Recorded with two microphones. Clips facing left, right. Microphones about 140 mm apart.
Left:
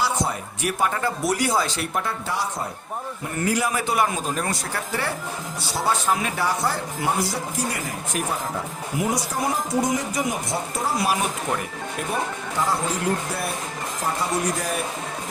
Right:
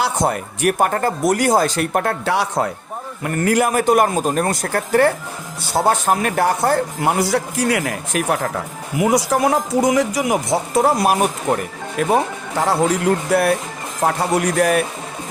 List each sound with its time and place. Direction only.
0.0 s speech: 60° right (ahead or behind); by 2.6 s 75° right (ahead or behind)
3.2 s speech: 60° right (ahead or behind); by 10.9 s 80° right
11.0 s speech: 55° right (ahead or behind)
11.9 s speech: 90° right; by 14.8 s 70° right (ahead or behind)